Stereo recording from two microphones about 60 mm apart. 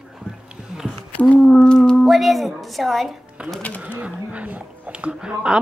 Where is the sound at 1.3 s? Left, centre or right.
Centre.